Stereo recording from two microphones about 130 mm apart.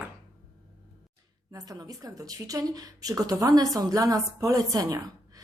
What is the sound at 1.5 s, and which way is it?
A woman's voice, 25° right (ahead or behind).